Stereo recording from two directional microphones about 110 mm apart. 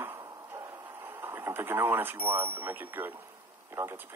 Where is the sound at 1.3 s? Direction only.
20° right (ahead or behind).